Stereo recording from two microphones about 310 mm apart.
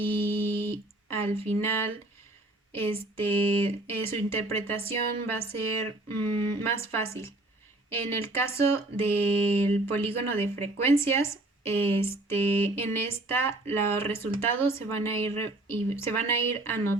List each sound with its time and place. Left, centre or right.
0.0 s music: centre
2.7 s speech: centre